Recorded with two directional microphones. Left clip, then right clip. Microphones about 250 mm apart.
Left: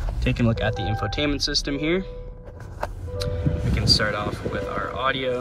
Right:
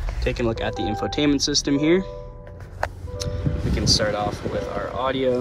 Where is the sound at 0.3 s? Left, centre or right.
Centre.